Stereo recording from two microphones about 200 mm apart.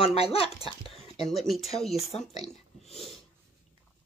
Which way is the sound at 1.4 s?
Centre (ahead or behind).